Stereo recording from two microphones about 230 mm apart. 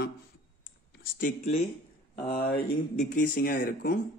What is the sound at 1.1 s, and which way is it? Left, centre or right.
Speech, left.